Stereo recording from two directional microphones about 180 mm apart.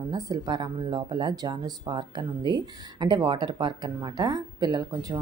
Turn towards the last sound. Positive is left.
turn(degrees=-20)  # may be behind; listen again after turning